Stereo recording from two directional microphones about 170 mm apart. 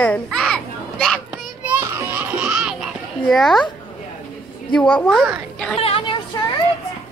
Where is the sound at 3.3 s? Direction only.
Centre (ahead or behind).